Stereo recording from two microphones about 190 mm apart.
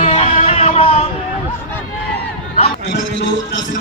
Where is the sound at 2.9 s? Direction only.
65° left (ahead or behind).